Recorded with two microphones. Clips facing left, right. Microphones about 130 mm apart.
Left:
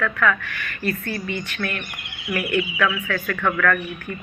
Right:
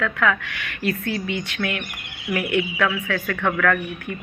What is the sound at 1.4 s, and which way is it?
Speech, 80° right.